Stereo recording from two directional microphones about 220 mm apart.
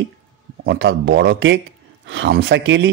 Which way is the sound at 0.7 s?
50° right (ahead or behind).